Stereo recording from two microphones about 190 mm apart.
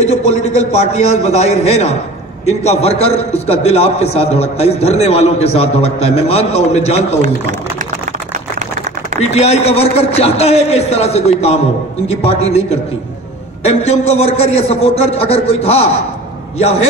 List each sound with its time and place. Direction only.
0.0 s a man's voice: 35° left (ahead or behind)
9.2 s a man's voice: 35° left (ahead or behind)